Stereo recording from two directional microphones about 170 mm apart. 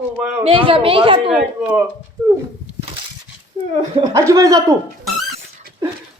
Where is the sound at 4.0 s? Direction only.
15° right (ahead or behind).